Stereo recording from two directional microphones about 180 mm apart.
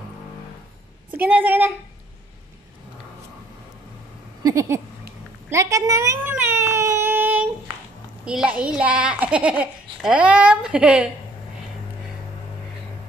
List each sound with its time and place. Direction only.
1.1 s a woman's voice: 10° right (ahead or behind)
4.4 s a sound: 20° right (ahead or behind)
8.3 s a child's voice: 5° right (ahead or behind)